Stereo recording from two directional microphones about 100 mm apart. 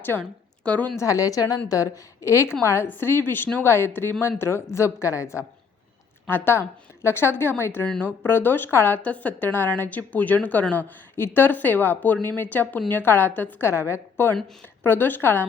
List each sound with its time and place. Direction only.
0.2 s a woman's voice: 10° left (ahead or behind)
0.9 s a woman's voice: 35° left (ahead or behind)